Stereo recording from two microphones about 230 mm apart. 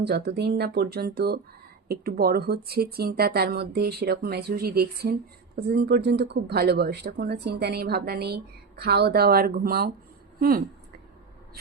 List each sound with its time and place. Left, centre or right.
0.0 s speech: right